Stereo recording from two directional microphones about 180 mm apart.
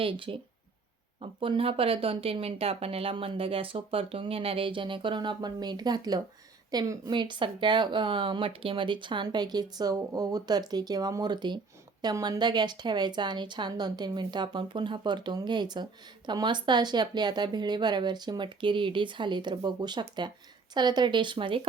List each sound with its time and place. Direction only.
0.0 s speech: 30° right (ahead or behind)